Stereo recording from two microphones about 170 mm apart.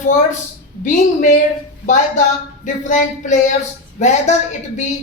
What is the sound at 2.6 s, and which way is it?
A woman's voice, 45° left (ahead or behind).